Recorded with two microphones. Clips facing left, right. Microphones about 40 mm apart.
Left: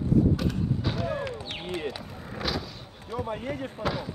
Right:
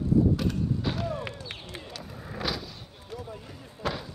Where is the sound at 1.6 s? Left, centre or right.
Left.